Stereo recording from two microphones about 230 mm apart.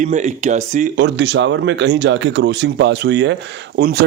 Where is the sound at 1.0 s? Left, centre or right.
Right.